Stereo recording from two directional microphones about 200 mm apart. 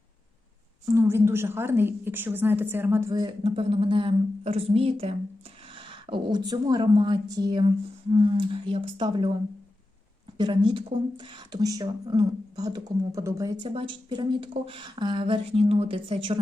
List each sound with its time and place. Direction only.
0.9 s a woman's voice: 15° right (ahead or behind)
10.3 s speech: 20° right (ahead or behind)
13.7 s speech: 25° right (ahead or behind)